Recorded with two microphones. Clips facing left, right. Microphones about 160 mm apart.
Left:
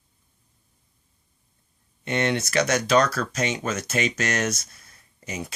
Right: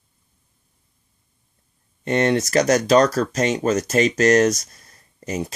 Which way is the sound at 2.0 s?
40° right (ahead or behind).